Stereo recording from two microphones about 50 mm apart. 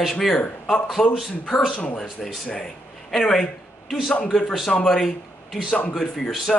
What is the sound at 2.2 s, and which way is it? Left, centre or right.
A man's voice, centre.